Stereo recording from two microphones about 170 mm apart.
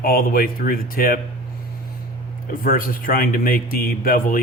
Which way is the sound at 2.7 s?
55° left (ahead or behind).